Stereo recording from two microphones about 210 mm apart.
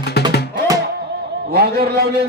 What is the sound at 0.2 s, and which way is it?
Music, 50° left (ahead or behind).